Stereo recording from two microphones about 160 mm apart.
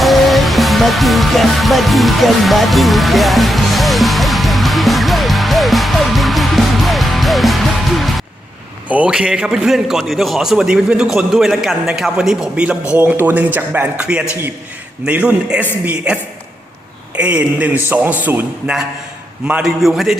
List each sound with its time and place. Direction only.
0.0 s music: centre (ahead or behind)
8.9 s a man's voice: 5° right (ahead or behind)
17.2 s a man's voice: 5° right (ahead or behind)